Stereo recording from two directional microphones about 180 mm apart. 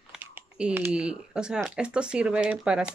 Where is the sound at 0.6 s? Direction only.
10° right (ahead or behind).